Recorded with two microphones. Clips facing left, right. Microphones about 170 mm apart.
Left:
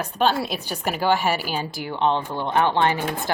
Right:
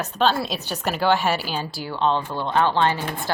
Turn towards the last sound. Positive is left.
turn(degrees=15)  # may be behind; listen again after turning